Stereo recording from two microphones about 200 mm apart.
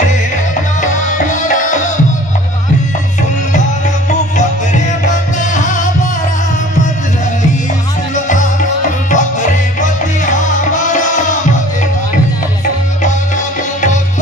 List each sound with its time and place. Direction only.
0.7 s music: 40° left (ahead or behind)
5.0 s music: 40° left (ahead or behind)
8.3 s music: 40° left (ahead or behind)